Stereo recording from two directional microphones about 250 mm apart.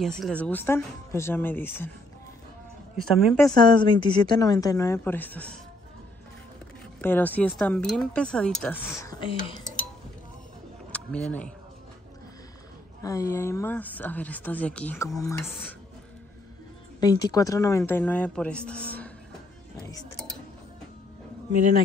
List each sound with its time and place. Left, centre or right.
0.2 s speech: centre
3.2 s speech: centre
3.6 s speech: centre
7.0 s speech: centre
10.9 s speech: centre
13.0 s speech: centre
17.0 s speech: centre